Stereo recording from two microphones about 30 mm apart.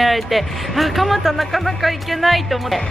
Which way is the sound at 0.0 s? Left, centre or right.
Centre.